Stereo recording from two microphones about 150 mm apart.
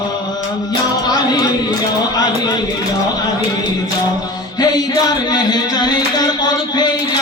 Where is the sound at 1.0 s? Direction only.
30° left (ahead or behind).